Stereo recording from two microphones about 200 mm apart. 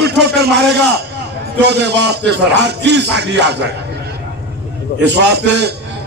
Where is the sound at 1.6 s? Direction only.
60° right (ahead or behind).